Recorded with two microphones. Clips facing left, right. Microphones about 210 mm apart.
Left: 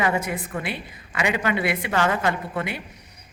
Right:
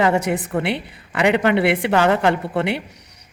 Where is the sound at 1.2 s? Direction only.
65° right (ahead or behind).